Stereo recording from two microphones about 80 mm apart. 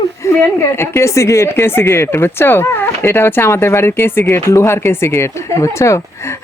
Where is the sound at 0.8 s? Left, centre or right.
Left.